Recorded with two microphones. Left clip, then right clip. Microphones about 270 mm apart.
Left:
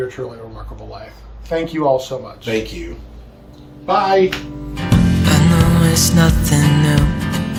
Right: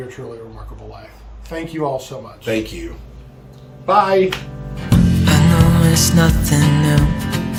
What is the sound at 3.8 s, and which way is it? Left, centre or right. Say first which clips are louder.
Speech: right 2 dB; centre.